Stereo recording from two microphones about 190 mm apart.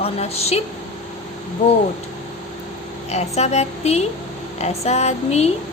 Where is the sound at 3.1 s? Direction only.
35° left (ahead or behind).